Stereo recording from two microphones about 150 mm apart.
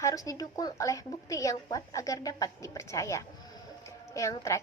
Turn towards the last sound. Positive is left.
turn(degrees=20)  # may be behind; listen again after turning